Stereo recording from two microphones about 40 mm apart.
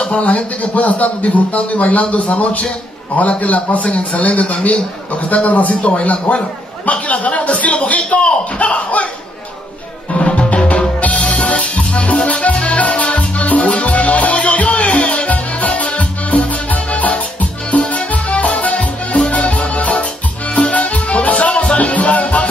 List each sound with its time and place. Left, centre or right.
0.1 s a man's voice: left
10.1 s music: left